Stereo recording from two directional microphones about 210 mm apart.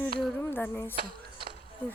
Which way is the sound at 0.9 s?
45° right (ahead or behind).